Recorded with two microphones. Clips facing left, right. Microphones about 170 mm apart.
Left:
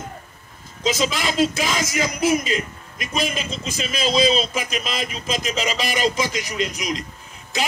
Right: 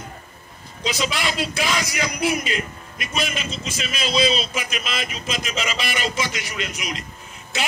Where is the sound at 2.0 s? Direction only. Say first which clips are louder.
Left 4 dB; 40° left (ahead or behind).